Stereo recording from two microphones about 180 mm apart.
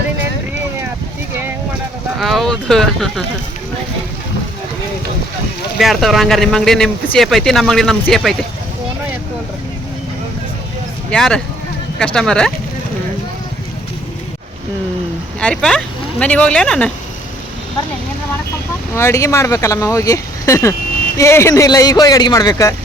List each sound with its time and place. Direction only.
2.1 s speech: centre (ahead or behind)
5.7 s speech: centre (ahead or behind)
11.1 s speech: 5° left (ahead or behind)
15.4 s speech: 5° left (ahead or behind)
18.9 s speech: 15° left (ahead or behind)